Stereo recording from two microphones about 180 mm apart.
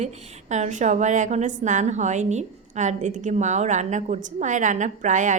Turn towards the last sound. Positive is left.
turn(degrees=-45)  # may be behind; listen again after turning